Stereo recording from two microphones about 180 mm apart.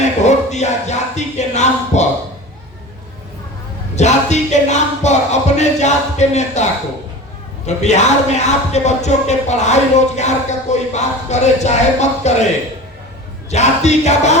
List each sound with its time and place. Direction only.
0.0 s speech: 40° left (ahead or behind)
3.9 s music: 40° left (ahead or behind)
7.8 s music: 40° left (ahead or behind)
13.5 s music: 40° left (ahead or behind)